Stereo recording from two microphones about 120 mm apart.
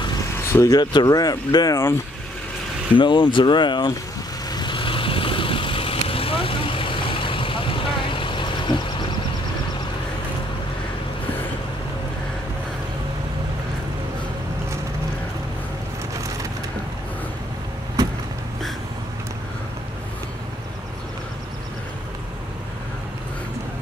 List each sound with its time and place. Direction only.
0.5 s speech: 25° left (ahead or behind)
0.7 s speech: 35° left (ahead or behind)
3.0 s speech: 40° left (ahead or behind)
4.5 s vehicle: 40° left (ahead or behind)